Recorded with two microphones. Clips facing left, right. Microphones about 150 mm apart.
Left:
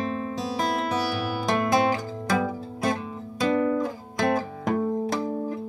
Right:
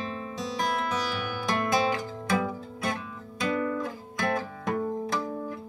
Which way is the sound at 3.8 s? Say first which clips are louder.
Left 5 dB; 30° left (ahead or behind).